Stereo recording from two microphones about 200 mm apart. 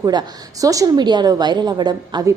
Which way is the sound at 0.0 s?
20° right (ahead or behind).